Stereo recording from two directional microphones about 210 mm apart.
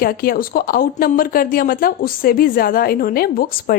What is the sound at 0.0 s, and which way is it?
Speech, 45° left (ahead or behind).